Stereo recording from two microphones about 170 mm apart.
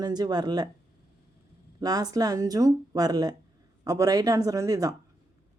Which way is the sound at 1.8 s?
20° right (ahead or behind).